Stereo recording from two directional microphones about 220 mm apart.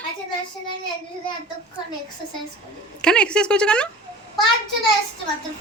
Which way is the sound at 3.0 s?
5° left (ahead or behind).